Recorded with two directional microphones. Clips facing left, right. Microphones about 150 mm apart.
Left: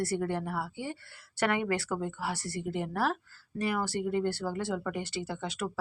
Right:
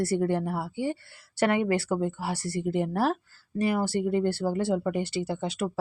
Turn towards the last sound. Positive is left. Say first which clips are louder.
# right 6 dB
turn(degrees=-30)  # may be behind; listen again after turning